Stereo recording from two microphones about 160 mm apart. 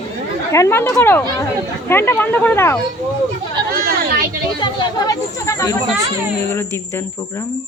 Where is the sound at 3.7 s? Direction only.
75° right (ahead or behind).